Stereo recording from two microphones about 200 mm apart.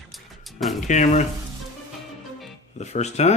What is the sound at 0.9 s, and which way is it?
Speech, 35° left (ahead or behind).